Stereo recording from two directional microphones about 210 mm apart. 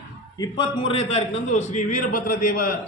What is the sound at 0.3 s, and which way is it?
A man's voice, 20° left (ahead or behind).